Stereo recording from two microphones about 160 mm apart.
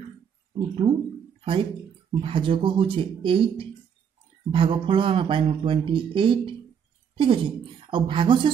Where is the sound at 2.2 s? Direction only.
35° right (ahead or behind).